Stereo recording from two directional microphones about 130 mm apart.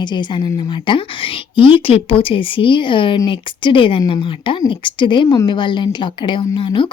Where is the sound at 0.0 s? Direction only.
35° left (ahead or behind).